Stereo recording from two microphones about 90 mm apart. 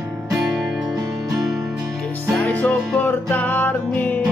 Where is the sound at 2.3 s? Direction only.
15° left (ahead or behind).